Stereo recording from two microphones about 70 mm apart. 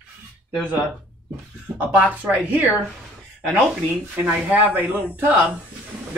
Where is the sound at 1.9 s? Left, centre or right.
Right.